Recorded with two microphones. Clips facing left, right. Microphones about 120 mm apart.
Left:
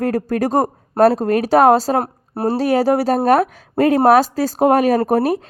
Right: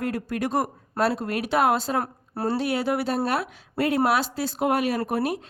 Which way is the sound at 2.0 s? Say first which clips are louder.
Left 7 dB; 25° left (ahead or behind).